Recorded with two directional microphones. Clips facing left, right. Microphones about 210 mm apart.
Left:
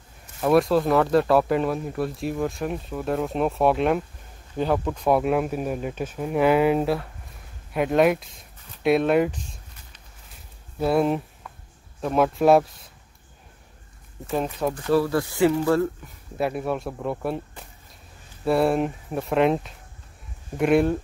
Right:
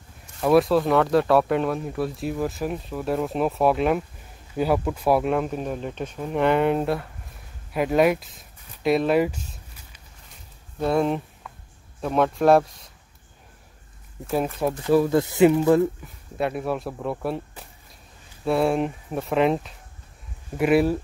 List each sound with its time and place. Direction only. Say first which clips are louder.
0.4 s speech: right 1 dB; centre (ahead or behind)
7.7 s a sound: even; centre (ahead or behind)
10.8 s speech: left 1 dB; 5° left (ahead or behind)
14.2 s speech: right 1 dB; 5° right (ahead or behind)
14.8 s speech: right 3 dB; 15° right (ahead or behind)
16.3 s speech: even; centre (ahead or behind)